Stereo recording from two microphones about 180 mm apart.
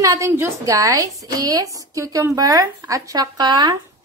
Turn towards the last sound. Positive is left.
turn(degrees=-20)  # may be behind; listen again after turning